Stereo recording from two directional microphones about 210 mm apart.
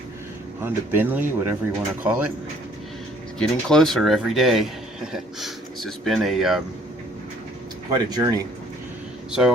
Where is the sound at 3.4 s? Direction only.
Centre (ahead or behind).